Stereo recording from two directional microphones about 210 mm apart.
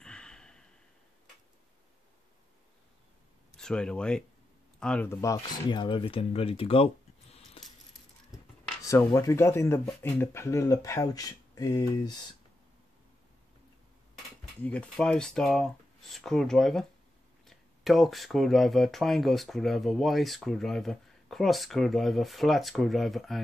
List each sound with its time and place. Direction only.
0.0 s a sound: 5° left (ahead or behind)
3.5 s speech: 5° left (ahead or behind); by 7.6 s 30° left (ahead or behind)
8.8 s speech: 15° left (ahead or behind)
14.6 s speech: 5° left (ahead or behind)